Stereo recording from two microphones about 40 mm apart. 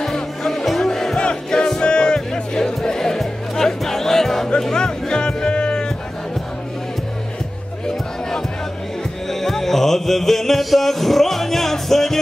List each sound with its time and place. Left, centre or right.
0.0 s music: centre
1.1 s music: left
9.3 s music: centre